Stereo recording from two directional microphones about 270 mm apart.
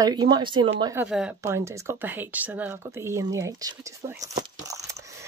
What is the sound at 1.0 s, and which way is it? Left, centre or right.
Speech, centre.